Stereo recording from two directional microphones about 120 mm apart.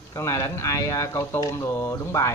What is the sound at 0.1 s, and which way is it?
Speech, 25° left (ahead or behind).